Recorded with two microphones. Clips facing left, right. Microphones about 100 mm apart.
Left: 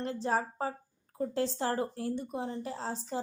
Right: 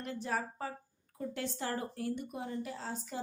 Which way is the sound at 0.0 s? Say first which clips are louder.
Left 5 dB; 30° left (ahead or behind).